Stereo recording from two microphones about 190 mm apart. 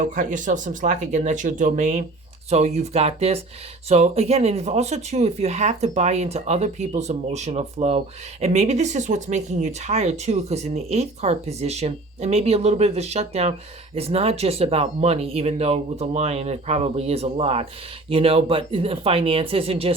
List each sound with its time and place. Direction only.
0.0 s speech: 45° right (ahead or behind)